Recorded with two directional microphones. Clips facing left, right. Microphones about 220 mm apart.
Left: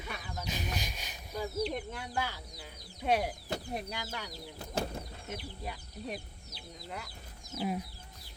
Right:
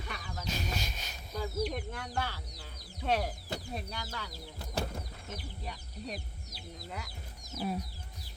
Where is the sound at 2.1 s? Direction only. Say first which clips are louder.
Left 2 dB; 10° left (ahead or behind).